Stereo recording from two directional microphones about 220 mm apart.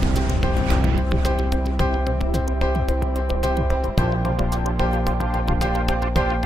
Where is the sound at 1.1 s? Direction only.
Centre (ahead or behind).